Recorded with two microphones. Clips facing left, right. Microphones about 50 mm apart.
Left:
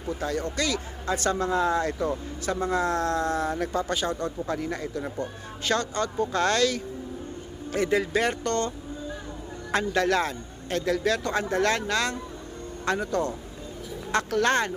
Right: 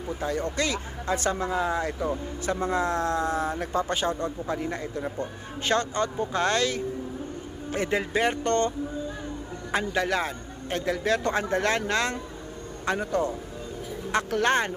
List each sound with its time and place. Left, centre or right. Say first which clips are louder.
0.1 s speech: even; centre
9.7 s a man's voice: left 2 dB; centre